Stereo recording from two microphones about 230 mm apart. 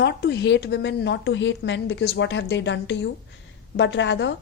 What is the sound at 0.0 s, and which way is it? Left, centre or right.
A woman's voice, left.